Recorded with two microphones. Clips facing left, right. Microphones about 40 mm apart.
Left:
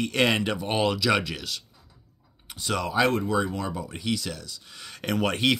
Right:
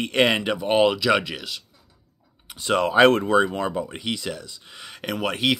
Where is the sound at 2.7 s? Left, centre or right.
Right; by 5.6 s centre.